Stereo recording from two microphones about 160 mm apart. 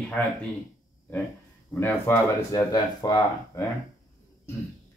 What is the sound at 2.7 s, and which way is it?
Speech, 25° left (ahead or behind).